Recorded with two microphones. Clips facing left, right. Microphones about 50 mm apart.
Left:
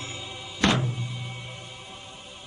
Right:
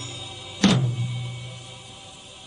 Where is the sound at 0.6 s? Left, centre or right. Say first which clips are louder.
Right 3 dB; centre.